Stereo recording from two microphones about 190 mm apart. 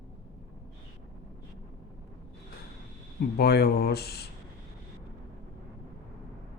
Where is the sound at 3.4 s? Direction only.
55° left (ahead or behind).